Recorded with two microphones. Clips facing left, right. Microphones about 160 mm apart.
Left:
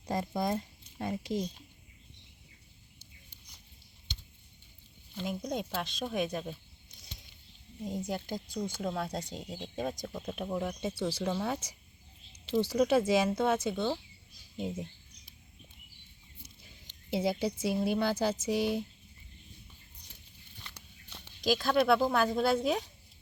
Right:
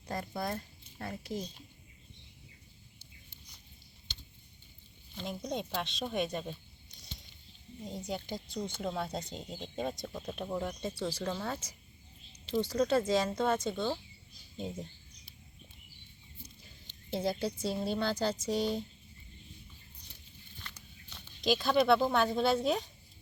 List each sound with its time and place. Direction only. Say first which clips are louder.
0.0 s speech: left 5 dB; 20° left (ahead or behind)
5.1 s speech: left 2 dB; 5° left (ahead or behind)
7.9 s a woman's voice: left 3 dB; 5° left (ahead or behind)
16.8 s a woman's voice: left 2 dB; 10° left (ahead or behind)
21.4 s speech: even; centre (ahead or behind)